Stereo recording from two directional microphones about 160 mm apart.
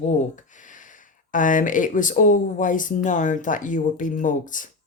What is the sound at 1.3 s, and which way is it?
Speech, 55° left (ahead or behind).